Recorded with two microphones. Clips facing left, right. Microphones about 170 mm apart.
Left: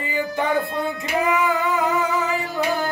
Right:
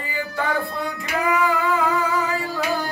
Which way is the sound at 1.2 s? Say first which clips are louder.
Even; 20° left (ahead or behind).